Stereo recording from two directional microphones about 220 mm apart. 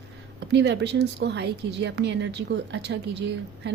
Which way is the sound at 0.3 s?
50° right (ahead or behind).